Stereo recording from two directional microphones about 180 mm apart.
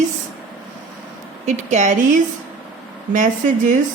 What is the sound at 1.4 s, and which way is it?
Speech, 40° right (ahead or behind).